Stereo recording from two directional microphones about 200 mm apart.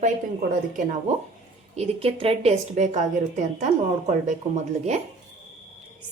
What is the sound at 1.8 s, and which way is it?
A woman's voice, 30° right (ahead or behind).